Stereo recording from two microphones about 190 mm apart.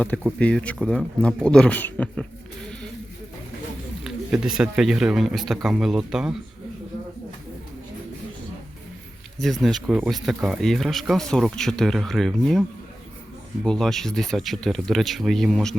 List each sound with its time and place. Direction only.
0.0 s speech: 5° left (ahead or behind)
4.0 s speech: 5° right (ahead or behind)
9.4 s speech: centre (ahead or behind)
13.7 s speech: centre (ahead or behind)